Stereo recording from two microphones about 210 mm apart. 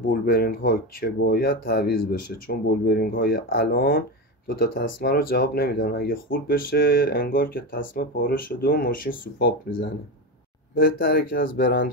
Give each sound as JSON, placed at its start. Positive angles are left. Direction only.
{"t": 0.1, "sound": "speech", "side_deg": 45}
{"t": 10.7, "sound": "speech", "side_deg": 50}